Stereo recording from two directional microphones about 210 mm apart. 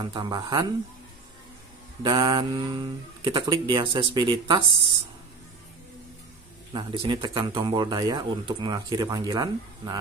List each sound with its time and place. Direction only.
0.0 s speech: 20° right (ahead or behind)
2.0 s speech: 20° right (ahead or behind)
6.7 s speech: 20° right (ahead or behind)